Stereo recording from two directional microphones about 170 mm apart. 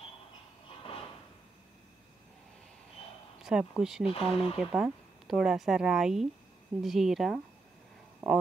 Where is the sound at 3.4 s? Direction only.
5° right (ahead or behind).